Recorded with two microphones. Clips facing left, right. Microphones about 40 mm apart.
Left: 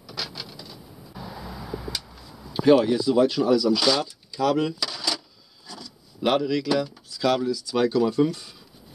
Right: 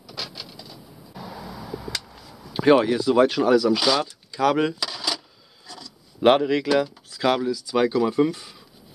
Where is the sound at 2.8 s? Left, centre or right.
Right.